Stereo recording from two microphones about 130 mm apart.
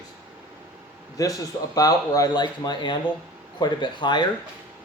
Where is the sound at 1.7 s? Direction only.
30° left (ahead or behind).